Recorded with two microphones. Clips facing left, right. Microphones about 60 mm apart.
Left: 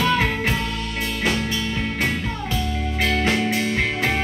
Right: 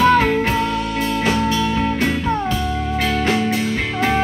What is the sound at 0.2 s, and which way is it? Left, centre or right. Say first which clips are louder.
Music: right 5 dB; centre.